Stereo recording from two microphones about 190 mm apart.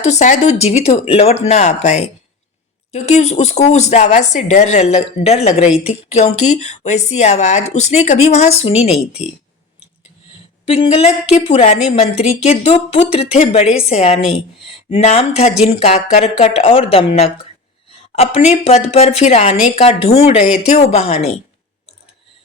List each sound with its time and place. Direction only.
0.0 s a woman's voice: 35° left (ahead or behind)
10.7 s a woman's voice: 30° left (ahead or behind)